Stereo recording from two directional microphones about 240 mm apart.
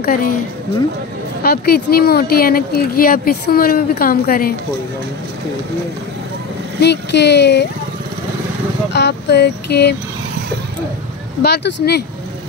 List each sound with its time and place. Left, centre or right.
0.0 s speech: left
1.4 s speech: left
6.8 s speech: left
8.9 s speech: left
11.4 s speech: left